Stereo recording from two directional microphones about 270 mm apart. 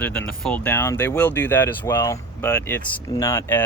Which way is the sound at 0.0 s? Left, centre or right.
Centre.